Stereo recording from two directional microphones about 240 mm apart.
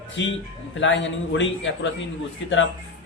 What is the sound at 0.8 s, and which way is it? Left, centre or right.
Speech, left.